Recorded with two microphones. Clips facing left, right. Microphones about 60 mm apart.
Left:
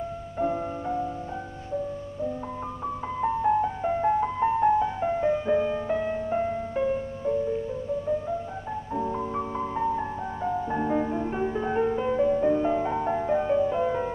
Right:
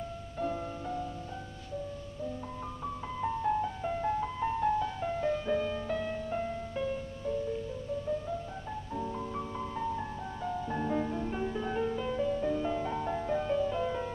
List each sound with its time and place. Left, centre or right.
0.4 s music: left
3.2 s music: left
8.9 s music: left